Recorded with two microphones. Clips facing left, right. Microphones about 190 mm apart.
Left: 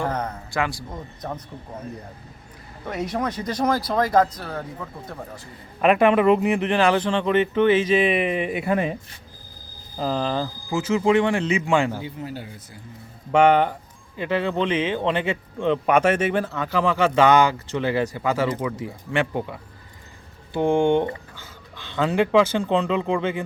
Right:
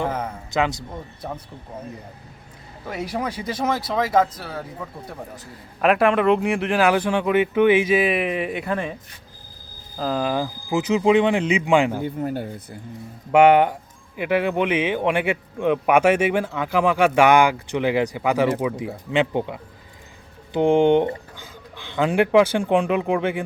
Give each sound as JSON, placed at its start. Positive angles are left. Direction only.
{"t": 0.1, "sound": "speech", "side_deg": -5}
{"t": 0.5, "sound": "speech", "side_deg": -20}
{"t": 2.8, "sound": "speech", "side_deg": -5}
{"t": 5.8, "sound": "speech", "side_deg": 0}
{"t": 10.0, "sound": "speech", "side_deg": -5}
{"t": 12.0, "sound": "speech", "side_deg": -55}
{"t": 13.3, "sound": "speech", "side_deg": -10}